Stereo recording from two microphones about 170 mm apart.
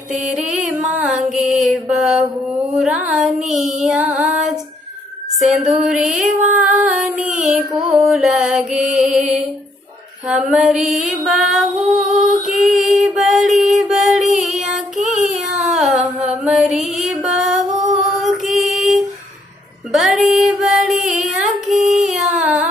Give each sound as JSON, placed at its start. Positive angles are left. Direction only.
{"t": 0.1, "sound": "music", "side_deg": 0}
{"t": 2.7, "sound": "female singing", "side_deg": -10}
{"t": 5.4, "sound": "female singing", "side_deg": 0}
{"t": 7.2, "sound": "child singing", "side_deg": -50}
{"t": 7.7, "sound": "female singing", "side_deg": -5}
{"t": 14.3, "sound": "child singing", "side_deg": 0}
{"t": 15.8, "sound": "music", "side_deg": -5}
{"t": 17.7, "sound": "female singing", "side_deg": 0}
{"t": 21.4, "sound": "music", "side_deg": 0}
{"t": 22.1, "sound": "a sound", "side_deg": 0}